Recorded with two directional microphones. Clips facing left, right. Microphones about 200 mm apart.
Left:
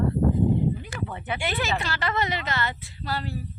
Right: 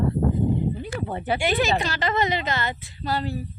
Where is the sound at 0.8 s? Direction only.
35° right (ahead or behind).